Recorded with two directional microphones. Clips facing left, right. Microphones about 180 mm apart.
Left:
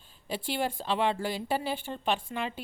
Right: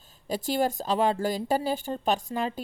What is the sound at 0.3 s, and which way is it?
Speech, 40° right (ahead or behind).